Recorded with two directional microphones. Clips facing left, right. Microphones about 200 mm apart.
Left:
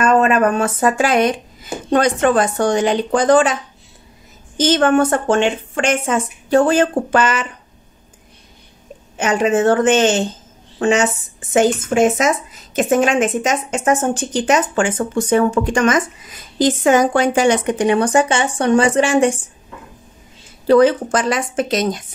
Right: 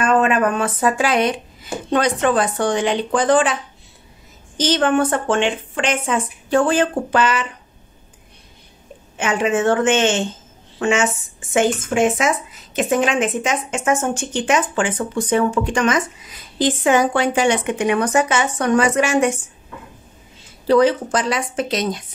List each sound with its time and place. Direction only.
0.0 s a woman's voice: 40° left (ahead or behind)
4.6 s a woman's voice: 45° left (ahead or behind)
9.2 s a woman's voice: 40° left (ahead or behind)
20.6 s a woman's voice: 50° left (ahead or behind)